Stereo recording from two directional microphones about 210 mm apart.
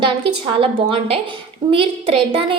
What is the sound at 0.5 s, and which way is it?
Speech, 25° right (ahead or behind).